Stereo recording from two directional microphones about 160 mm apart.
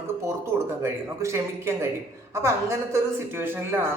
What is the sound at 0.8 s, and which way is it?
Speech, 15° right (ahead or behind).